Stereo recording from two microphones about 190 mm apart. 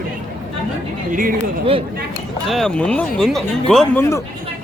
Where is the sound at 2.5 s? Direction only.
5° left (ahead or behind).